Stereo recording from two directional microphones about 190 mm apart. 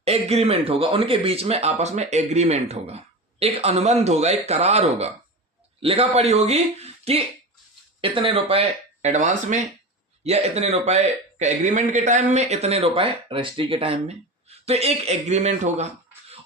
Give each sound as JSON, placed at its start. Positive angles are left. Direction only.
{"t": 0.0, "sound": "speech", "side_deg": -30}